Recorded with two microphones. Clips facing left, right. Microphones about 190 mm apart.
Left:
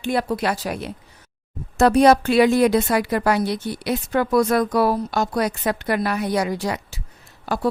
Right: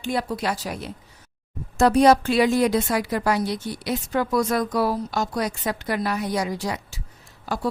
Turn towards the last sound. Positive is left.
turn(degrees=60)  # may be behind; listen again after turning